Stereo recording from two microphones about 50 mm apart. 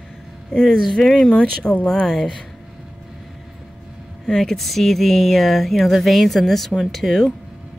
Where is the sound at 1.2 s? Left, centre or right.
Centre.